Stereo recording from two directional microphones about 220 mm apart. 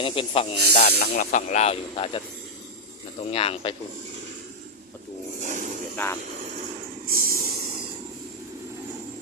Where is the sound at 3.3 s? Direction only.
25° left (ahead or behind).